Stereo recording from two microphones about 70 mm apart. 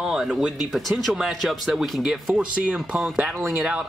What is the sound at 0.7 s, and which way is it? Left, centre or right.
Speech, centre.